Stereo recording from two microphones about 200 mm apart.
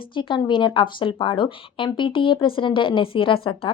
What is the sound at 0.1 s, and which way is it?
A woman's voice, 25° left (ahead or behind).